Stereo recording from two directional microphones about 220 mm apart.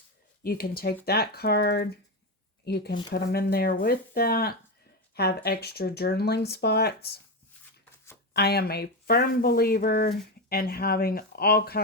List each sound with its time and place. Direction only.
0.4 s speech: 40° left (ahead or behind)
8.3 s speech: 45° left (ahead or behind)